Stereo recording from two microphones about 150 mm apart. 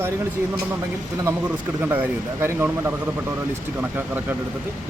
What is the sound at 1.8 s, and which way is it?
Speech, 15° right (ahead or behind).